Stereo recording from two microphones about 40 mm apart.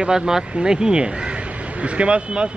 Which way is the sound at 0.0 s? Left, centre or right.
Right.